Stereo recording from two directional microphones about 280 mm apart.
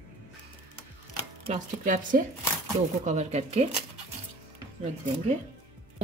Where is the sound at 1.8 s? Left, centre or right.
Right.